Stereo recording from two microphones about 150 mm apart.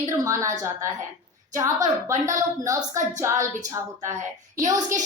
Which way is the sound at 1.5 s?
20° right (ahead or behind).